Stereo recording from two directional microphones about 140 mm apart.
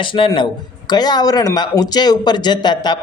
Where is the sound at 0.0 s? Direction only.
35° left (ahead or behind).